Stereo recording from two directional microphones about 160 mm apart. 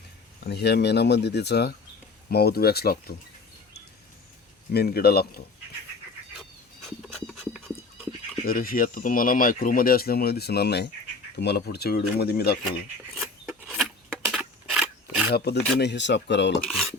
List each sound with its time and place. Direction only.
0.4 s speech: 90° left
2.3 s speech: 75° left (ahead or behind)
4.7 s speech: 80° left
7.1 s a sound: centre (ahead or behind)
8.4 s speech: 60° left (ahead or behind); by 12.5 s 80° left
13.1 s filing: 5° right (ahead or behind)
14.1 s a sound: 5° right (ahead or behind)
15.3 s speech: 90° left